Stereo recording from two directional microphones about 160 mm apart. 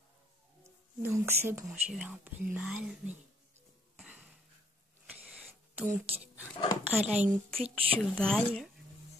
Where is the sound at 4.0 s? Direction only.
5° right (ahead or behind).